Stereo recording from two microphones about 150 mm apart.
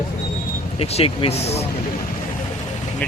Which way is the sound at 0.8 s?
40° left (ahead or behind).